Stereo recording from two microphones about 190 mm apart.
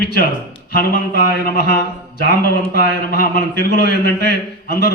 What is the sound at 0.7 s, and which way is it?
A man's voice, 50° left (ahead or behind).